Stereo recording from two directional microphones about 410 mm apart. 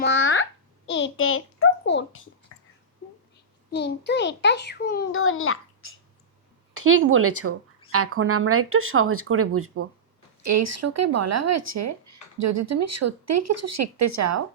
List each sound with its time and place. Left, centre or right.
0.0 s babbling: left
0.9 s a sound: left
2.5 s whispering: left
3.8 s a child's voice: left
6.8 s speech: right